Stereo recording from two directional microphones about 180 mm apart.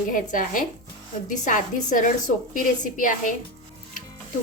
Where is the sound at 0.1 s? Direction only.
45° left (ahead or behind).